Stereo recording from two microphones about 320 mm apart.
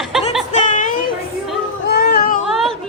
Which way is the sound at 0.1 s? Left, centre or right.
Centre.